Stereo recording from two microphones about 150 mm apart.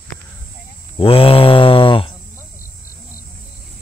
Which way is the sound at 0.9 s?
40° left (ahead or behind).